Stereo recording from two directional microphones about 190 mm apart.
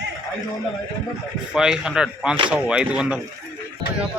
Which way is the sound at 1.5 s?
5° right (ahead or behind).